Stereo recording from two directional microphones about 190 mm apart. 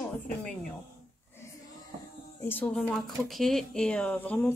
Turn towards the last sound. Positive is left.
turn(degrees=10)  # may be behind; listen again after turning